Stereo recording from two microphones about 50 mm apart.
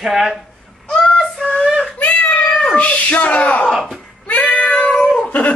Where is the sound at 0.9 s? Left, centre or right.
Centre.